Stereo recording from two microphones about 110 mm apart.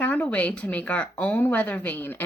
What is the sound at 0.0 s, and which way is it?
Speech, 15° left (ahead or behind).